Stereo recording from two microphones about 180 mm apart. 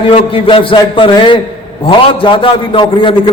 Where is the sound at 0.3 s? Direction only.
30° left (ahead or behind).